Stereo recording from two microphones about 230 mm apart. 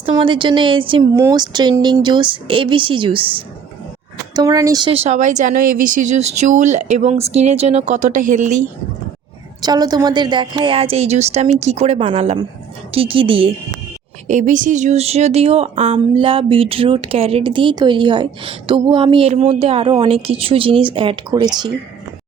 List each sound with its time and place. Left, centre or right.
0.0 s speech: right
9.6 s speech: centre
14.3 s speech: right